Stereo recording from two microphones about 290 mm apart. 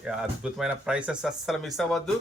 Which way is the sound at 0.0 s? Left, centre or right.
Centre.